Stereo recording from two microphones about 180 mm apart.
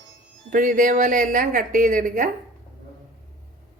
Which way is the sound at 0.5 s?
50° right (ahead or behind).